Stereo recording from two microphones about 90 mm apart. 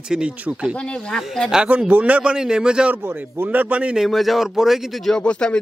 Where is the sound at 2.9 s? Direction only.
20° right (ahead or behind).